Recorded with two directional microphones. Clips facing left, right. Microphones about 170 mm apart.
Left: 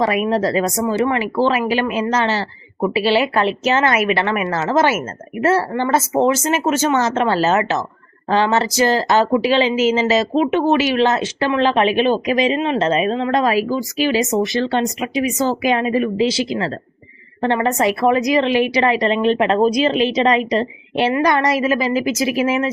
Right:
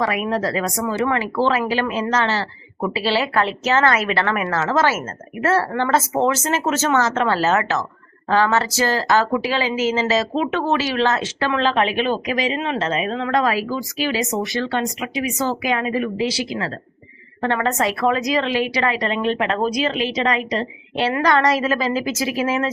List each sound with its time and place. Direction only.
0.0 s a woman's voice: 20° left (ahead or behind)